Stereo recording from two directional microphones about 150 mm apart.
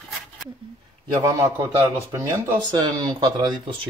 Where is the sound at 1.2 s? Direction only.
25° right (ahead or behind).